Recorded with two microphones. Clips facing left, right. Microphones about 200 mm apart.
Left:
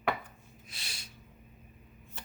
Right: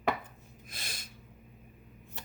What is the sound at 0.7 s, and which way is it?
Speech, 50° right (ahead or behind).